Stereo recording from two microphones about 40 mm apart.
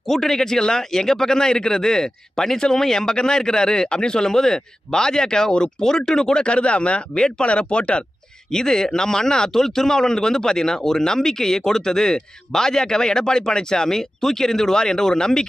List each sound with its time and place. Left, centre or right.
0.0 s speech: centre; by 8.0 s left
8.5 s speech: centre